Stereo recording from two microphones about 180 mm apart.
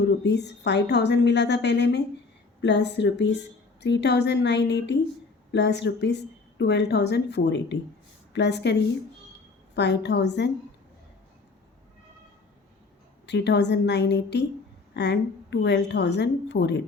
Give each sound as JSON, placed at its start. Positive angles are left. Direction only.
{"t": 0.3, "sound": "a woman's voice", "side_deg": 70}
{"t": 9.7, "sound": "a woman's voice", "side_deg": 70}
{"t": 13.2, "sound": "a woman's voice", "side_deg": 70}